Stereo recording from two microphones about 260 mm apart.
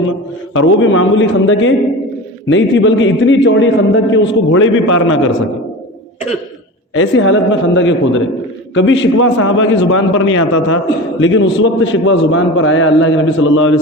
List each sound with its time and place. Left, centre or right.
0.5 s a man's voice: left
6.9 s a man's voice: left